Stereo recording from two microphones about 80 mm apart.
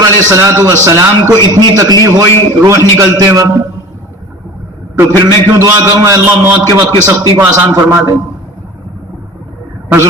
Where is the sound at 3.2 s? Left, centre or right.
Right.